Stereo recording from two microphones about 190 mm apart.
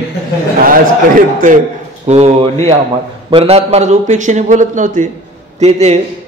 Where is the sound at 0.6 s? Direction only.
45° right (ahead or behind).